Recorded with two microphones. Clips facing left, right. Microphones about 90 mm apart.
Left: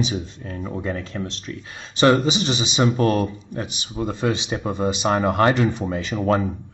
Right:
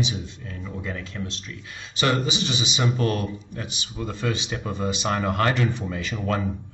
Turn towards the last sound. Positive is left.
turn(degrees=30)  # may be behind; listen again after turning